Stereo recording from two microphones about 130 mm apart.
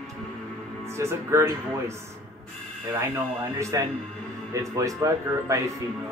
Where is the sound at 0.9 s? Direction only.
20° right (ahead or behind).